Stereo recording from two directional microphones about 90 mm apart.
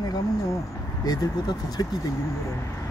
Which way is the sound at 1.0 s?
45° left (ahead or behind).